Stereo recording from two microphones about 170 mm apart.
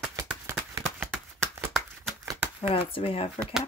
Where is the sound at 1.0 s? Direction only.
5° right (ahead or behind).